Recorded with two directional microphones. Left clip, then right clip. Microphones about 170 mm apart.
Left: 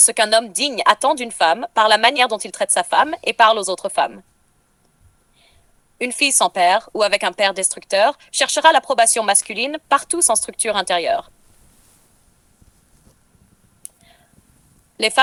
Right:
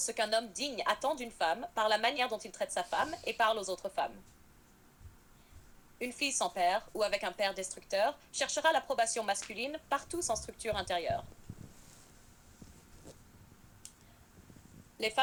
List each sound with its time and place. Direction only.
0.0 s speech: 50° left (ahead or behind)
6.0 s speech: 50° left (ahead or behind)
14.9 s a woman's voice: 50° left (ahead or behind)